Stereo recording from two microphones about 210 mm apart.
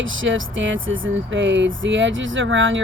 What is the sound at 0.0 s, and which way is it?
Speech, 65° right (ahead or behind).